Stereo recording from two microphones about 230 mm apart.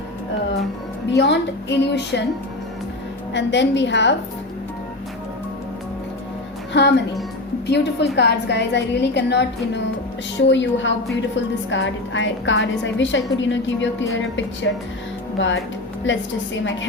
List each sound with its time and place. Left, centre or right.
1.1 s a woman's voice: left
3.3 s a woman's voice: left
6.7 s a woman's voice: left